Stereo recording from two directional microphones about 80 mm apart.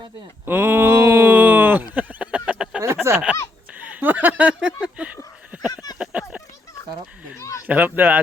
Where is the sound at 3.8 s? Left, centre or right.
Centre.